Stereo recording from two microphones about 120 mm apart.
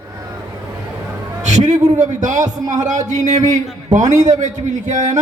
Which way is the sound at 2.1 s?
80° right.